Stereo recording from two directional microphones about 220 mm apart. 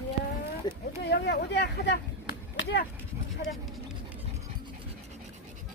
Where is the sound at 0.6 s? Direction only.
20° left (ahead or behind).